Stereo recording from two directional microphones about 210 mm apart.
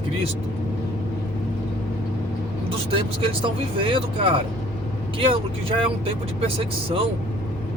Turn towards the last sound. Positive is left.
turn(degrees=-25)  # may be behind; listen again after turning